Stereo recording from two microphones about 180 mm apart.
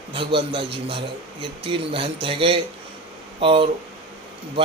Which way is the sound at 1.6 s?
30° right (ahead or behind).